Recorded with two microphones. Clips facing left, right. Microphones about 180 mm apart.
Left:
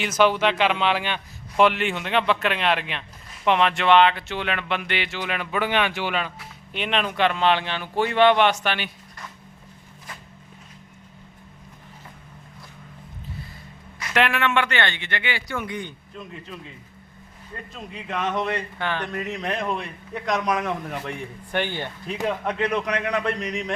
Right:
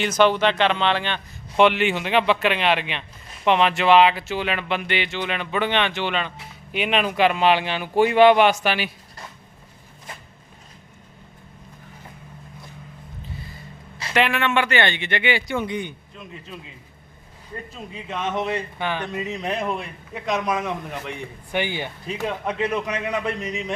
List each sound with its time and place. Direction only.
0.0 s a man's voice: 5° left (ahead or behind)
6.7 s speech: 5° right (ahead or behind)
14.1 s speech: centre (ahead or behind); by 16.0 s 20° right (ahead or behind)
17.7 s a man's voice: 5° right (ahead or behind)
19.2 s a man's voice: centre (ahead or behind)